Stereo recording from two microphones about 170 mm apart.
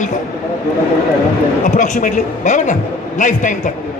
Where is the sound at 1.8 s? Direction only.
50° left (ahead or behind).